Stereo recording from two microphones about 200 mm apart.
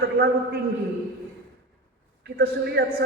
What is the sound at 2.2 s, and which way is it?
Speech, 50° right (ahead or behind).